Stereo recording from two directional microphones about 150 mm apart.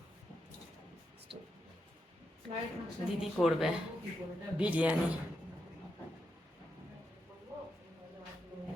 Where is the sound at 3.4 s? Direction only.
10° left (ahead or behind).